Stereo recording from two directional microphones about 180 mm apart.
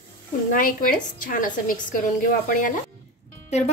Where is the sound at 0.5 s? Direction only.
50° left (ahead or behind).